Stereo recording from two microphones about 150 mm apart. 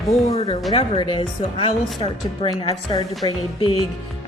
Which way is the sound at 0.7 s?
35° left (ahead or behind).